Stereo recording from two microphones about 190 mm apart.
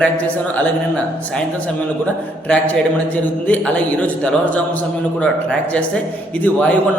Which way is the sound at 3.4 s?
10° left (ahead or behind).